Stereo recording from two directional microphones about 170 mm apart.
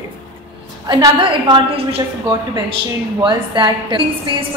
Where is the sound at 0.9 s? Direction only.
30° right (ahead or behind).